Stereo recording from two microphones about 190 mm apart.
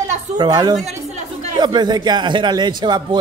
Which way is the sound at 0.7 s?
35° right (ahead or behind).